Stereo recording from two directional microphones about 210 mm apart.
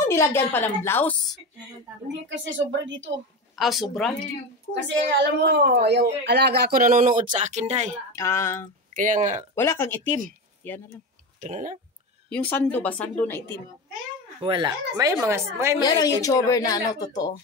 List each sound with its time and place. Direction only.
0.0 s speech: 10° left (ahead or behind)
2.2 s speech: 60° right (ahead or behind)
3.5 s speech: centre (ahead or behind)
4.8 s a woman's voice: 55° right (ahead or behind); by 8.0 s 35° right (ahead or behind)
8.2 s speech: 15° left (ahead or behind)
8.9 s speech: 40° right (ahead or behind)
9.6 s speech: 10° left (ahead or behind)
11.4 s speech: 35° right (ahead or behind)
12.3 s speech: 5° left (ahead or behind)
14.4 s speech: 20° right (ahead or behind)
15.8 s speech: 20° left (ahead or behind)